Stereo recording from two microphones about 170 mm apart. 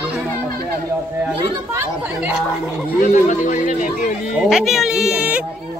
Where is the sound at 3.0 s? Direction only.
50° left (ahead or behind).